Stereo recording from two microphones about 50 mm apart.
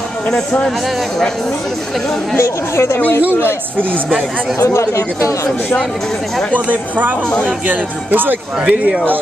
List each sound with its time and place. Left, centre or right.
2.7 s speech: left
4.6 s speech: left
6.5 s speech: right
8.6 s speech: right